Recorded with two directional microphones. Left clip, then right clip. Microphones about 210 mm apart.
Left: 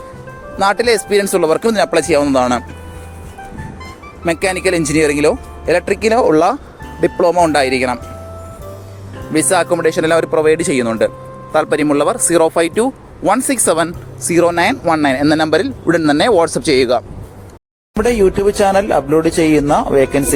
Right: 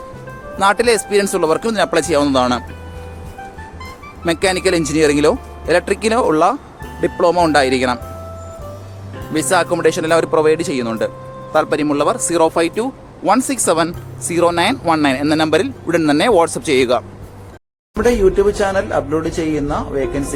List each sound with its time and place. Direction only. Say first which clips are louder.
0.5 s a man's voice: left 1 dB; 20° left (ahead or behind)
4.3 s speech: even; 20° left (ahead or behind)
9.3 s a man's voice: left 2 dB; 20° left (ahead or behind)
17.9 s speech: even; 35° left (ahead or behind)